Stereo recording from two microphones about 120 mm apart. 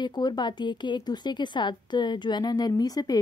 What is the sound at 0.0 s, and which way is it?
A woman's voice, 35° left (ahead or behind).